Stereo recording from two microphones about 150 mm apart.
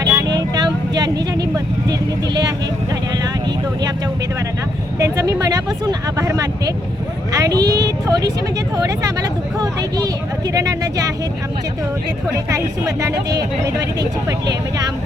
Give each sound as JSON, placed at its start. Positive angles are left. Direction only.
{"t": 0.0, "sound": "vehicle", "side_deg": -20}
{"t": 1.5, "sound": "speech", "side_deg": -25}
{"t": 4.9, "sound": "vehicle", "side_deg": -20}
{"t": 7.3, "sound": "speech", "side_deg": -25}
{"t": 10.5, "sound": "speech", "side_deg": -20}
{"t": 12.3, "sound": "speech", "side_deg": -20}
{"t": 14.3, "sound": "speech", "side_deg": -25}